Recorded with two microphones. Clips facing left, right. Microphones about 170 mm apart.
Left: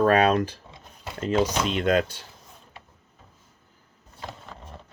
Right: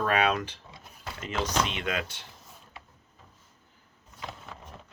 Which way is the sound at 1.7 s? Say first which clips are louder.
Left 10 dB; 40° left (ahead or behind).